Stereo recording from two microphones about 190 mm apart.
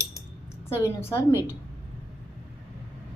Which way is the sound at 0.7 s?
15° left (ahead or behind).